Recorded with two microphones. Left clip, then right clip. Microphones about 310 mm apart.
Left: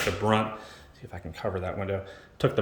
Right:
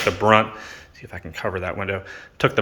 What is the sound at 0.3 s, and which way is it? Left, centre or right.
Speech, centre.